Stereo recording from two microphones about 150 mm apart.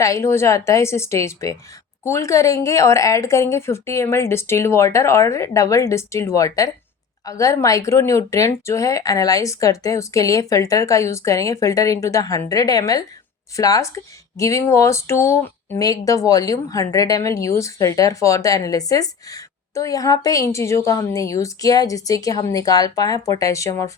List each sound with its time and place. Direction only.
0.0 s speech: 20° left (ahead or behind)